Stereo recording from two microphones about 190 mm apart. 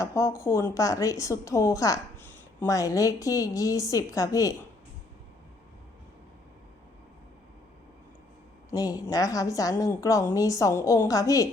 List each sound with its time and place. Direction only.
0.0 s a woman's voice: 15° left (ahead or behind)
8.7 s a woman's voice: 20° left (ahead or behind)